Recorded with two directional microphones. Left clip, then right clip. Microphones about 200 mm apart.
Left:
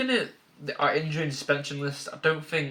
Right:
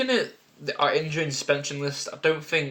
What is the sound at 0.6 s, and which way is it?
Speech, 35° right (ahead or behind).